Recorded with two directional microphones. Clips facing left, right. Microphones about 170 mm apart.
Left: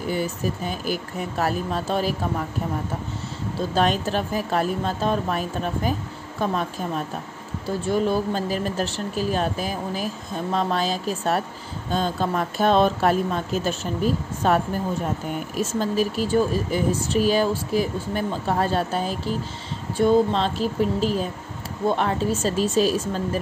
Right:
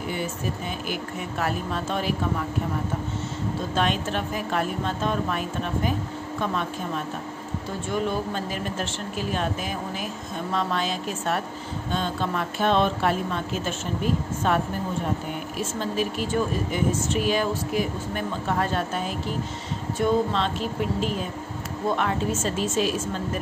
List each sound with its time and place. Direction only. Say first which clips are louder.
0.1 s a woman's voice: left 5 dB; 40° left (ahead or behind)
3.7 s a woman's voice: left 4 dB; 35° left (ahead or behind)
7.8 s a woman's voice: left 5 dB; 35° left (ahead or behind)